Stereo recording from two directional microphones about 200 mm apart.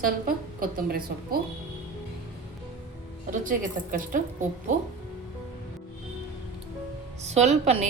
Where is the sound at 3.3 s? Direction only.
40° right (ahead or behind).